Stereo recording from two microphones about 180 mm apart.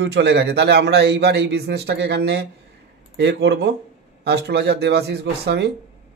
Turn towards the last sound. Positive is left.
turn(degrees=-70)  # may be behind; listen again after turning